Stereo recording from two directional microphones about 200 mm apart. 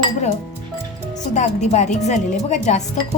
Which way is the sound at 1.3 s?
35° left (ahead or behind).